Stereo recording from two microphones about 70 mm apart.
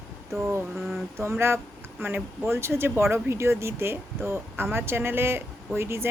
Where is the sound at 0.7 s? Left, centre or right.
Centre.